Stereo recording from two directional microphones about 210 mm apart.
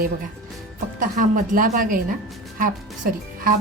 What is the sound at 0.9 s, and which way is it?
A woman's voice, 40° right (ahead or behind).